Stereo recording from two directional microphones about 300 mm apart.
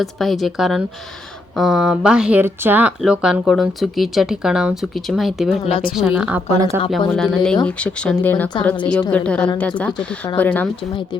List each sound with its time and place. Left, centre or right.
0.0 s speech: centre
5.6 s a woman's voice: centre
5.9 s speech: centre
8.9 s speech: centre
10.8 s speech: centre